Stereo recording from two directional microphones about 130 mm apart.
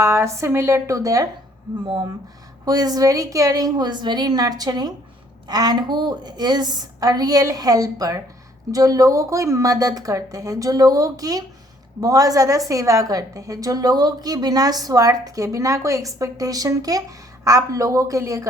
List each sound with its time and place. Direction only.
0.0 s a woman's voice: 20° right (ahead or behind)
2.6 s a woman's voice: 30° right (ahead or behind)